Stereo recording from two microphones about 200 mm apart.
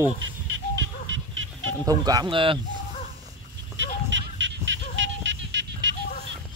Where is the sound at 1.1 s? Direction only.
80° right.